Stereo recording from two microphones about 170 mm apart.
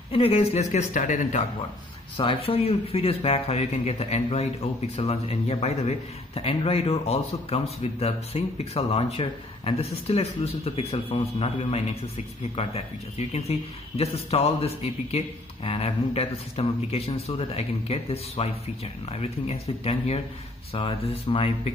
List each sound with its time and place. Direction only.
0.1 s speech: 35° left (ahead or behind)
2.1 s speech: 35° left (ahead or behind)